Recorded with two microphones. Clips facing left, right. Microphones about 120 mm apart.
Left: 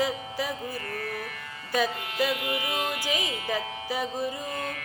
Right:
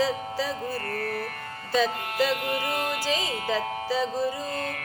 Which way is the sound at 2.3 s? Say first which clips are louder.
Right 2 dB; 55° right (ahead or behind).